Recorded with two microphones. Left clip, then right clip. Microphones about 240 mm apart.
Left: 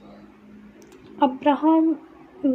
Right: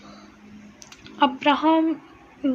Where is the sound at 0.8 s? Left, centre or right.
Centre.